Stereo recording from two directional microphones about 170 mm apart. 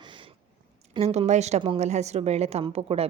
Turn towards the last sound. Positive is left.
turn(degrees=-35)  # may be behind; listen again after turning